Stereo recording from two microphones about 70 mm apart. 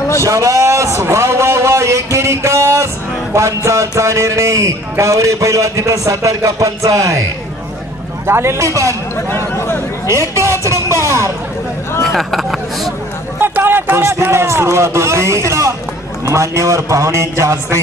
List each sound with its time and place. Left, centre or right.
0.2 s a man's voice: right
8.3 s speech: right
10.0 s vehicle: right
12.0 s speech: centre
13.4 s speech: right